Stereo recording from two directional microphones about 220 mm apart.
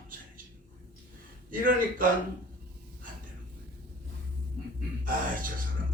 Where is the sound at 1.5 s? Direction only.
40° right (ahead or behind).